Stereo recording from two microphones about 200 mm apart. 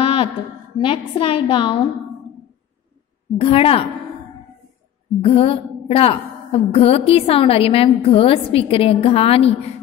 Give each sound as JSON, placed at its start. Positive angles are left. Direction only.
{"t": 0.0, "sound": "a sound", "side_deg": 30}
{"t": 0.8, "sound": "a woman's voice", "side_deg": 25}
{"t": 3.3, "sound": "a woman's voice", "side_deg": 30}
{"t": 5.2, "sound": "a woman's voice", "side_deg": 30}